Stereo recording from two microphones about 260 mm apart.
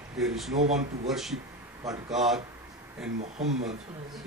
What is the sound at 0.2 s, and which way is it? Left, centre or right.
Speech, centre.